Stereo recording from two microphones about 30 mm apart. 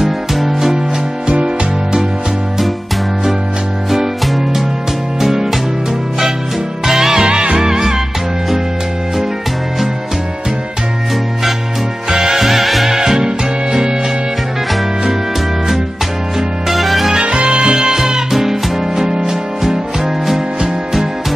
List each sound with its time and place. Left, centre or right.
0.0 s music: centre
1.3 s music: right
5.2 s music: centre
6.9 s music: centre
12.1 s music: centre
16.6 s music: centre
17.2 s music: right
17.6 s music: right
18.3 s music: centre
19.0 s music: right